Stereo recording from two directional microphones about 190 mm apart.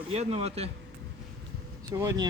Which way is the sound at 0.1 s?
35° right (ahead or behind).